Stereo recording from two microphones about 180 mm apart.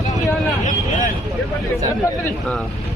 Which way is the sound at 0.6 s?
40° left (ahead or behind).